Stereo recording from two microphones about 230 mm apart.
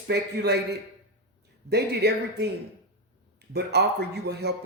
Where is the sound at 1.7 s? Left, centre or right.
Right.